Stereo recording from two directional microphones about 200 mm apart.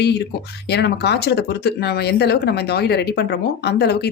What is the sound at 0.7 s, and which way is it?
Speech, 55° left (ahead or behind).